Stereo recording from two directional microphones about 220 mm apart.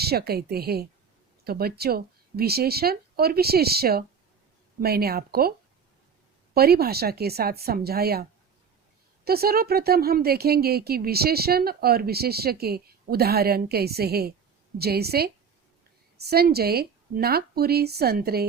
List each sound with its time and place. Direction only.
0.0 s speech: 45° right (ahead or behind)